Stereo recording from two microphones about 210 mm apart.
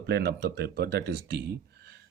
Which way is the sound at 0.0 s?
50° right (ahead or behind).